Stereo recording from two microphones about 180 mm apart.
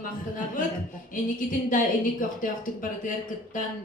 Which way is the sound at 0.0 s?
50° left (ahead or behind).